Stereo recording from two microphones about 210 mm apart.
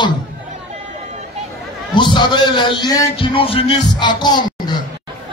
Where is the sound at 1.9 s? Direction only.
20° left (ahead or behind).